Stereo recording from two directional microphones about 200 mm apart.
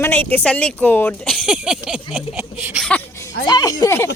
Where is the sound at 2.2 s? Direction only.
5° right (ahead or behind).